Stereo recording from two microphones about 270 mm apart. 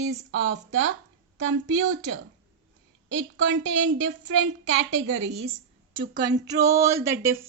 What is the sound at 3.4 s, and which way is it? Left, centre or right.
Speech, right.